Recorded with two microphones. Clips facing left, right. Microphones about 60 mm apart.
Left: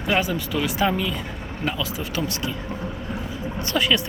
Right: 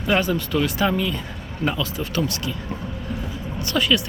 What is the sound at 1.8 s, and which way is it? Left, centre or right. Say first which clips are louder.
Speech: right 2 dB; centre.